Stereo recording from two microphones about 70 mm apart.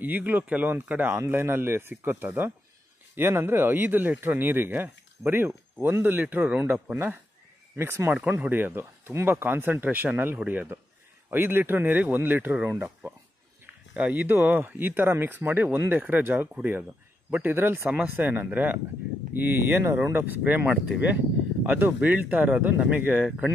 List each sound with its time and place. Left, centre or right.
0.0 s speech: right
1.3 s speech: right
7.7 s speech: right
8.2 s speech: right